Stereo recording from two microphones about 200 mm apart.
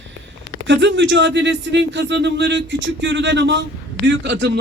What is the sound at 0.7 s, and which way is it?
A man's voice, 65° right (ahead or behind).